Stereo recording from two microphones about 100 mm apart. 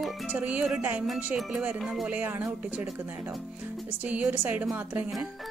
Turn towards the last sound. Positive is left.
turn(degrees=-15)  # may be behind; listen again after turning